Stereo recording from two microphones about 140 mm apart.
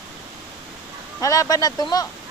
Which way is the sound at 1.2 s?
25° left (ahead or behind).